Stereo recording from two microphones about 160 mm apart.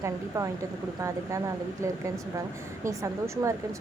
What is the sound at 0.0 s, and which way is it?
A woman's voice, 20° right (ahead or behind).